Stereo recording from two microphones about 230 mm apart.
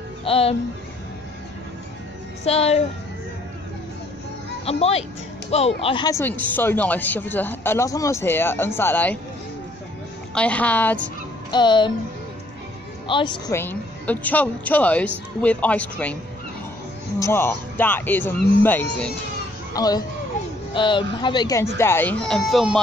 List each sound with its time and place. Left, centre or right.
0.2 s speech: left
2.4 s speech: left
4.6 s speech: left; by 9.2 s centre
10.3 s speech: centre
11.5 s speech: centre
13.1 s speech: left
13.6 s speech: centre
17.2 s speech: centre